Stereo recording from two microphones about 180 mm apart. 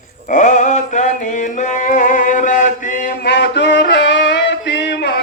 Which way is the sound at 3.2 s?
70° left (ahead or behind).